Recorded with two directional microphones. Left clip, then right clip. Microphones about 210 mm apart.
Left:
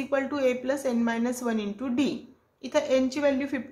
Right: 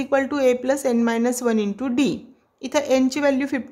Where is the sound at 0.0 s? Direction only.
45° right (ahead or behind).